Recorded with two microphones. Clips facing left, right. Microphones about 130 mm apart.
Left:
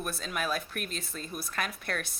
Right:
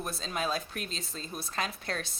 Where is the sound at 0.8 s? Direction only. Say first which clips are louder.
Left 1 dB; 55° left (ahead or behind).